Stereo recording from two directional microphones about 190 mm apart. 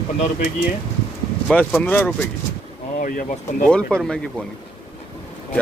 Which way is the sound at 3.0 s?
45° left (ahead or behind).